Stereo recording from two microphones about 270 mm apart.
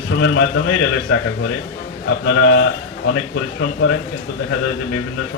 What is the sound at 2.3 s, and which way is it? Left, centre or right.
Speech, left.